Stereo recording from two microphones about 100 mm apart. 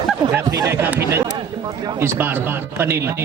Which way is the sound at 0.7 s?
25° right (ahead or behind).